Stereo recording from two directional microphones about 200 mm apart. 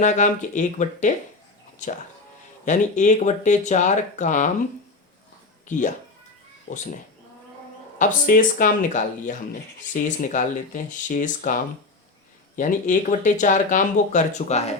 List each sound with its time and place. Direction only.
0.0 s speech: 40° left (ahead or behind)
2.6 s speech: 40° left (ahead or behind)
5.6 s speech: 40° left (ahead or behind)
7.9 s speech: 40° left (ahead or behind)